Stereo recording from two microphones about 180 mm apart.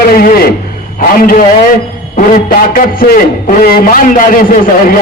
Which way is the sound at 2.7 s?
50° left (ahead or behind).